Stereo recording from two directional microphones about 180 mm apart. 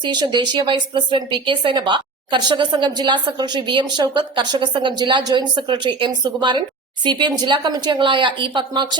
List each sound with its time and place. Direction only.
0.0 s a woman's voice: 25° right (ahead or behind)